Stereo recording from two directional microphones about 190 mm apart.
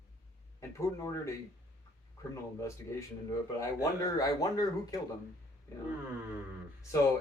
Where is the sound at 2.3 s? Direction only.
15° left (ahead or behind).